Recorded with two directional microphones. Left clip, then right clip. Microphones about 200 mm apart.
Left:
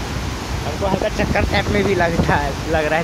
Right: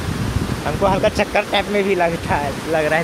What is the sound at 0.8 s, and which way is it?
Speech, 15° right (ahead or behind).